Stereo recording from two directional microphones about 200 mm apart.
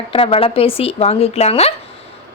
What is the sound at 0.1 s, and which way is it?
A woman's voice, 25° left (ahead or behind).